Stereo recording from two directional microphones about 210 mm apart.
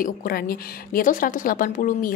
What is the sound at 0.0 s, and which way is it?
Speech, 45° left (ahead or behind).